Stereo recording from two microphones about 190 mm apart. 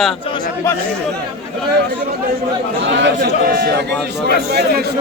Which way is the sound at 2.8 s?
70° right (ahead or behind).